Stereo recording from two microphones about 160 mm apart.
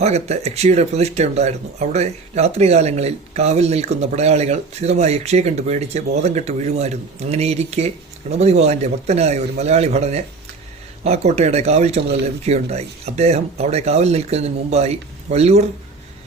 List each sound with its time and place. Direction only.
0.0 s speech: 45° right (ahead or behind)